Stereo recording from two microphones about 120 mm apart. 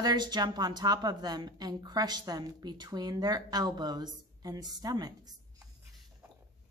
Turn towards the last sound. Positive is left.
turn(degrees=-35)  # may be behind; listen again after turning